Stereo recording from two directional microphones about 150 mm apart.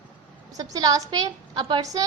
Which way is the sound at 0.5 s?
25° right (ahead or behind).